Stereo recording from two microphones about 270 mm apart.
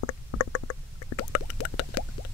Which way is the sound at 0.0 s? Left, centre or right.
Left.